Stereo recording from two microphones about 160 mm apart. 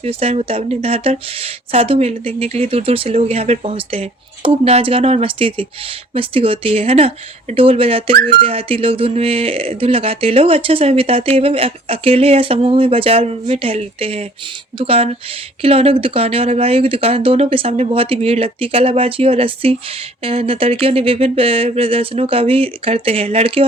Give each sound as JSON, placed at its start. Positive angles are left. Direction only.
{"t": 0.0, "sound": "speech", "side_deg": -40}